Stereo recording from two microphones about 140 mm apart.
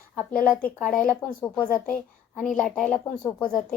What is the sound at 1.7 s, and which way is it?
Speech, 90° left.